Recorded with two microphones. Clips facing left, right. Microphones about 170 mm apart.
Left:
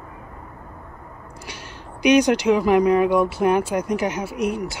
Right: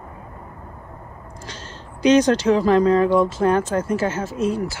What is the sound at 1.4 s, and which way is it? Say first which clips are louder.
Speech: even; 10° left (ahead or behind).